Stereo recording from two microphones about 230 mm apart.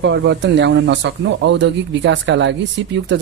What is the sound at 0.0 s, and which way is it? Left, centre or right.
Speech, right.